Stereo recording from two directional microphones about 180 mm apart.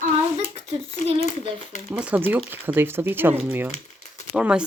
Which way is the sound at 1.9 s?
10° right (ahead or behind).